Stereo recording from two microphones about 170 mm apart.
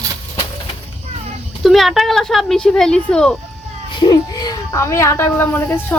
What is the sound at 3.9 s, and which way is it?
Speech, 25° left (ahead or behind).